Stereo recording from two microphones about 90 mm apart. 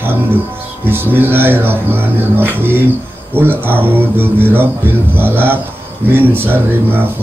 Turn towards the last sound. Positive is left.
turn(degrees=-25)  # may be behind; listen again after turning